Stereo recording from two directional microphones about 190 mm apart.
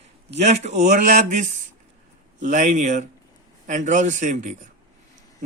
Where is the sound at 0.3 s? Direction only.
35° right (ahead or behind).